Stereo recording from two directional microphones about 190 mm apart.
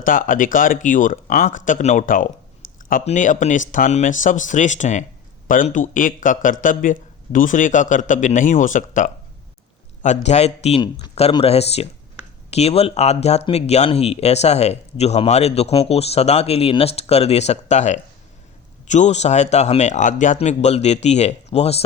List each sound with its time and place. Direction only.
0.0 s speech: 45° left (ahead or behind)